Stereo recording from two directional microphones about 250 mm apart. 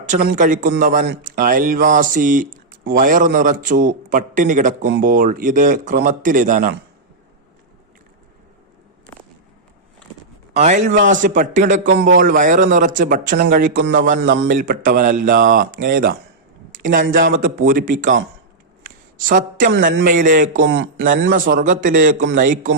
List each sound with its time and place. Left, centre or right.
0.1 s a man's voice: right
10.5 s a man's voice: right
19.3 s a man's voice: right
21.2 s a man's voice: right